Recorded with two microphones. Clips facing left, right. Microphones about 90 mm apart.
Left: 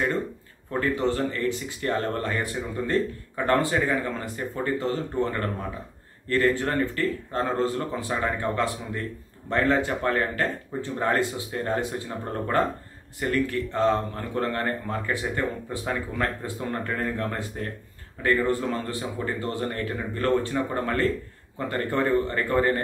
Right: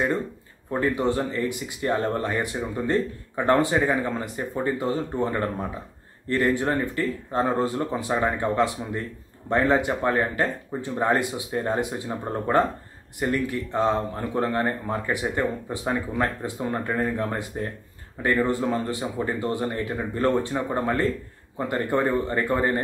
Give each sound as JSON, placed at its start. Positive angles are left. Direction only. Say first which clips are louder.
{"t": 0.7, "sound": "speech", "louder": "right 1 dB", "side_deg": -20}